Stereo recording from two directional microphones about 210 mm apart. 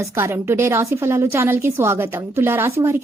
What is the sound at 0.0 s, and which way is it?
A woman's voice, 15° right (ahead or behind).